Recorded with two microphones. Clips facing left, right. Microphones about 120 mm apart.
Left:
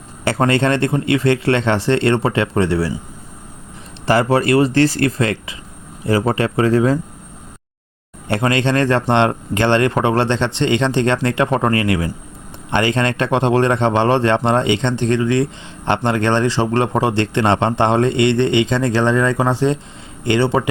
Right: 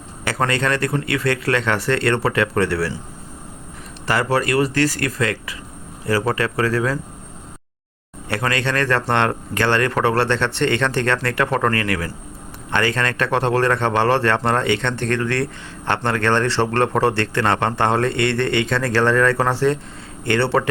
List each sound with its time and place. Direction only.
0.3 s a man's voice: 25° left (ahead or behind)
4.0 s a man's voice: 30° left (ahead or behind)
8.3 s a man's voice: 25° left (ahead or behind)